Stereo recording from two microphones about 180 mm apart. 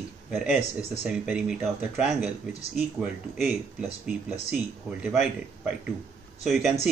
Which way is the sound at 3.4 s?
5° right (ahead or behind).